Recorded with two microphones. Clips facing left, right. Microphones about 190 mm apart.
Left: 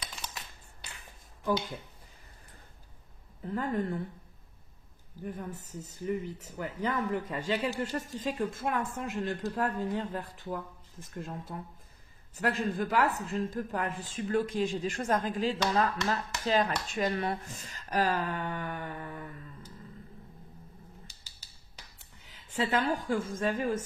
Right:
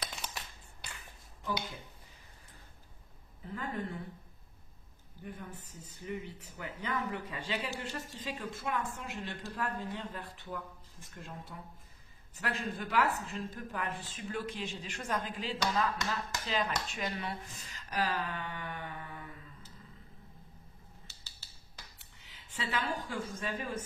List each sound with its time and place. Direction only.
3.5 s speech: 45° left (ahead or behind)
5.2 s speech: 45° left (ahead or behind)
22.3 s a woman's voice: 45° left (ahead or behind)